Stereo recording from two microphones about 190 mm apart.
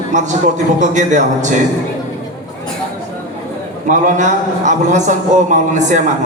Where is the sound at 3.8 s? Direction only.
40° right (ahead or behind).